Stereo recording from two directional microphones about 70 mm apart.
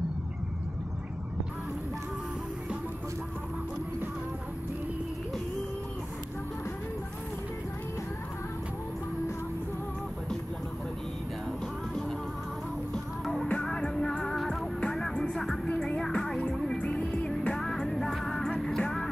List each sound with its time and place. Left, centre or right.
12.9 s music: centre
15.7 s music: centre
16.0 s music: centre
16.7 s music: centre
17.3 s music: centre